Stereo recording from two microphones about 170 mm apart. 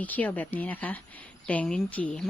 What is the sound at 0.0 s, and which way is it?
Speech, 10° left (ahead or behind).